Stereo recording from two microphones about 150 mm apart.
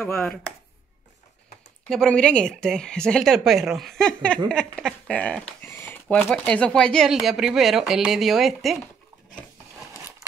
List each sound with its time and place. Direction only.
0.0 s speech: 5° left (ahead or behind)
1.9 s speech: 5° left (ahead or behind)
9.8 s a sound: 15° right (ahead or behind)